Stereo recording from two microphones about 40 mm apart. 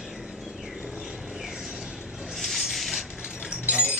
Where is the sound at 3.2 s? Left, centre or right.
Centre.